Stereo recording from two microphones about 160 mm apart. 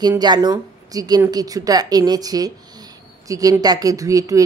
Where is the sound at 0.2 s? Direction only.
25° right (ahead or behind).